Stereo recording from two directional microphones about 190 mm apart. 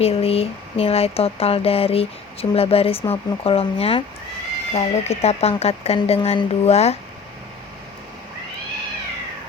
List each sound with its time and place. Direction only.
0.0 s speech: 30° left (ahead or behind)